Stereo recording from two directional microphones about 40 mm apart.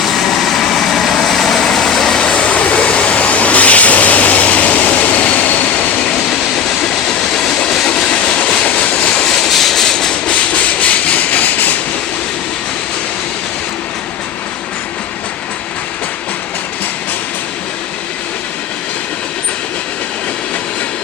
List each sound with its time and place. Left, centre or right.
0.0 s vehicle: centre
2.2 s vehicle: left
6.1 s train: centre
6.8 s vehicle: centre
7.9 s train: left
8.2 s train: left
8.4 s vehicle: left
9.2 s train: centre
10.2 s train: left